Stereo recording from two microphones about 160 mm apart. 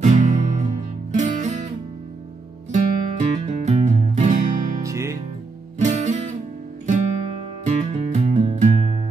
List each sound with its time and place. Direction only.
0.0 s music: 50° right (ahead or behind)
2.7 s music: 45° right (ahead or behind)
4.8 s music: 20° right (ahead or behind)
5.8 s music: 45° right (ahead or behind)
7.6 s music: 45° right (ahead or behind)